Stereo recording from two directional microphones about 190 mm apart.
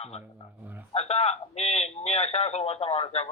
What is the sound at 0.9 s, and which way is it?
A man's voice, 35° left (ahead or behind).